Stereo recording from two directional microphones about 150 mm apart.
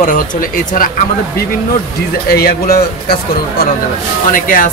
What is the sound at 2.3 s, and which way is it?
Speech, 90° left.